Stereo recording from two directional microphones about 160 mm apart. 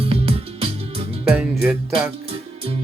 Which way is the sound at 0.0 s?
35° right (ahead or behind).